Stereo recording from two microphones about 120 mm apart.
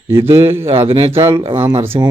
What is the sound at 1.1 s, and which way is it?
Speech, 25° right (ahead or behind).